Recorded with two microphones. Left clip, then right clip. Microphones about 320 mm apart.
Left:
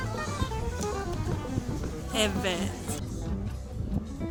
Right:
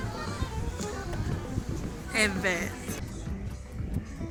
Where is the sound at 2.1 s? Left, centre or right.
Centre.